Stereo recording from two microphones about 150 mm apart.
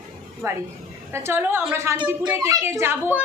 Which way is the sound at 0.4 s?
20° right (ahead or behind).